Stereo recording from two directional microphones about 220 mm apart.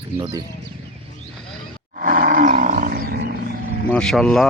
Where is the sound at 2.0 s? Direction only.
35° right (ahead or behind).